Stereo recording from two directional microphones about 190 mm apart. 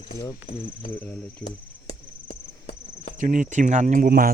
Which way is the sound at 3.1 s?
45° right (ahead or behind).